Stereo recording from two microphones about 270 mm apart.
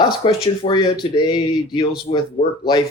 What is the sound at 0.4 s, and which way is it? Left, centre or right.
Speech, centre.